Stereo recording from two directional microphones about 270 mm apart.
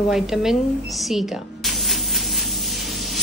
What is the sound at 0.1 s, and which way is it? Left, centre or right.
A woman's voice, centre.